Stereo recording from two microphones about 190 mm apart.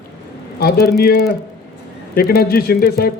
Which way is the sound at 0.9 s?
55° left (ahead or behind).